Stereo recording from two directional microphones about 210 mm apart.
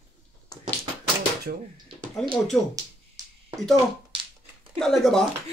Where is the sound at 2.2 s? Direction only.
Centre (ahead or behind).